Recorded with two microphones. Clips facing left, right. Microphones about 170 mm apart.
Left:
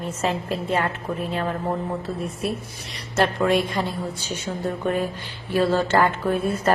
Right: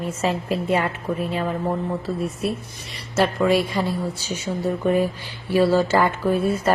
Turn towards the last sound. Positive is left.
turn(degrees=-10)  # may be behind; listen again after turning